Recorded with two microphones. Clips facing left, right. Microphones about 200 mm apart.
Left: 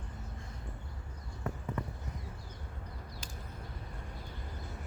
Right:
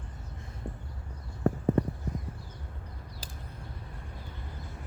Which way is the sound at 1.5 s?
40° right (ahead or behind).